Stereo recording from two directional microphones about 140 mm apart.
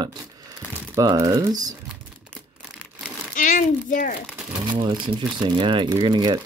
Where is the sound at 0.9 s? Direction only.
25° right (ahead or behind).